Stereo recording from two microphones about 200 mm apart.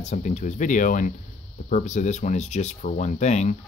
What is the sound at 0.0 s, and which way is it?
Speech, 35° left (ahead or behind).